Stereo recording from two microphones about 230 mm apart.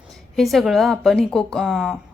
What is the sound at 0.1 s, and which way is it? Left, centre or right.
A woman's voice, centre.